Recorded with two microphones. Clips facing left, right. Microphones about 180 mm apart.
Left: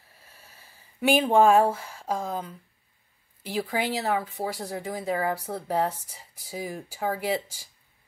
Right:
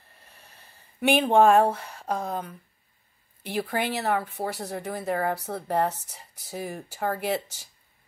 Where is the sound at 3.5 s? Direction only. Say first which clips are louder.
Even; 60° right (ahead or behind).